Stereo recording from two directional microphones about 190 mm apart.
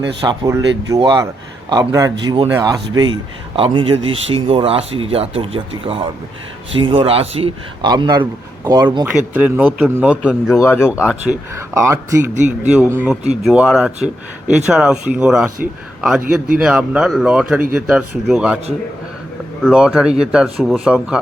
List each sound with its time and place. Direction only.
0.2 s a man's voice: 20° right (ahead or behind)
9.3 s a man's voice: 10° right (ahead or behind)
10.6 s speech: 15° left (ahead or behind)
11.1 s a man's voice: 5° right (ahead or behind)
16.6 s speech: 5° right (ahead or behind)
19.6 s speech: centre (ahead or behind)